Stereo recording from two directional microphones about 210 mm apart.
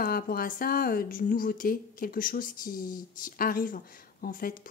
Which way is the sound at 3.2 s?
40° left (ahead or behind).